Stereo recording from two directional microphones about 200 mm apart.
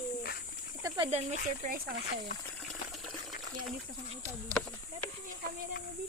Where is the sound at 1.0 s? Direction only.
35° right (ahead or behind).